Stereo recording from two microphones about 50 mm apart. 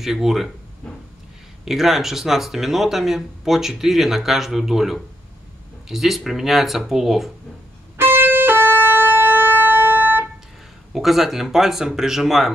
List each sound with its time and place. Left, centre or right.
0.0 s speech: centre
1.6 s speech: centre
8.0 s music: right
10.9 s speech: centre